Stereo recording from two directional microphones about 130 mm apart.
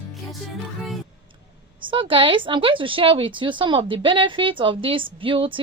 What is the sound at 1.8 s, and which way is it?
Speech, 40° right (ahead or behind).